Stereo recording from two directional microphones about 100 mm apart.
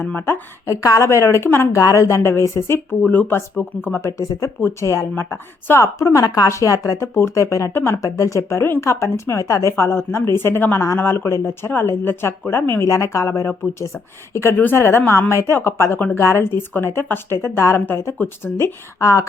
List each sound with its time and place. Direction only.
0.0 s a woman's voice: 25° left (ahead or behind)
4.2 s a woman's voice: 35° left (ahead or behind)